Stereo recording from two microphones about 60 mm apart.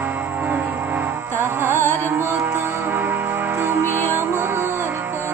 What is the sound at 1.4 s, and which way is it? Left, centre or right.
Music, right.